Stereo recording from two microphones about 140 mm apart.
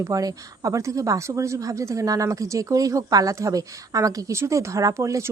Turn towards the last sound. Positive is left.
turn(degrees=-20)  # may be behind; listen again after turning